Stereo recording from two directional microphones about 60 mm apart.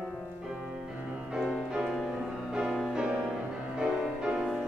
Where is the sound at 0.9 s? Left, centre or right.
Right.